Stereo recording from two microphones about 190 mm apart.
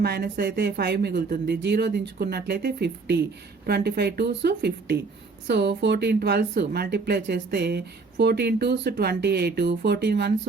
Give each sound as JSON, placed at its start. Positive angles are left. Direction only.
{"t": 0.0, "sound": "speech", "side_deg": -55}